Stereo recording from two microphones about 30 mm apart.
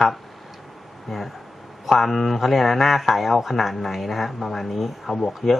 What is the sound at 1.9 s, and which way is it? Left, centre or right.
Speech, centre.